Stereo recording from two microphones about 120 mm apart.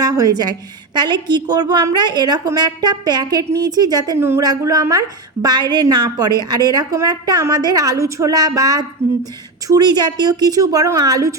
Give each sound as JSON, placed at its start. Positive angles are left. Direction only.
{"t": 0.0, "sound": "a woman's voice", "side_deg": -30}
{"t": 4.2, "sound": "speech", "side_deg": -20}
{"t": 4.4, "sound": "a woman's voice", "side_deg": -30}
{"t": 9.6, "sound": "a woman's voice", "side_deg": -35}